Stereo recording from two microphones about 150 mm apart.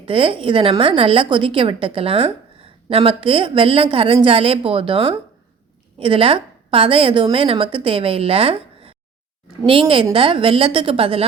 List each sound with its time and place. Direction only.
0.0 s a woman's voice: 35° right (ahead or behind)